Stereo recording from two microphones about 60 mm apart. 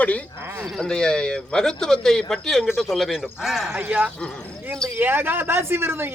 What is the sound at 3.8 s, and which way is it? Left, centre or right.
A man's voice, right.